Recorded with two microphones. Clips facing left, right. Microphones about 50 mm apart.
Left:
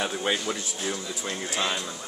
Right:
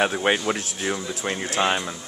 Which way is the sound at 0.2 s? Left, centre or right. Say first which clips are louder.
Right 5 dB; right.